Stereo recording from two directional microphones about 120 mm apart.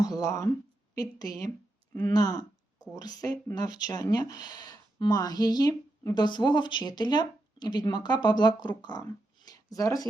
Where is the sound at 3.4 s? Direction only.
35° left (ahead or behind).